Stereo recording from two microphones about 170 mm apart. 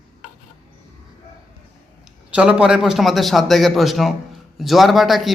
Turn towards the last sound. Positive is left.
turn(degrees=0)  # may be behind; listen again after turning